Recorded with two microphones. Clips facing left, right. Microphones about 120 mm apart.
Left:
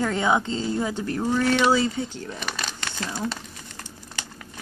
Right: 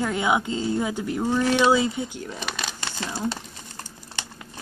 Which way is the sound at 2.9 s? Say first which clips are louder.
Even; 15° right (ahead or behind).